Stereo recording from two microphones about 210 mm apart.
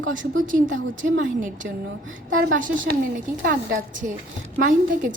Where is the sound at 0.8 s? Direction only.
65° right (ahead or behind).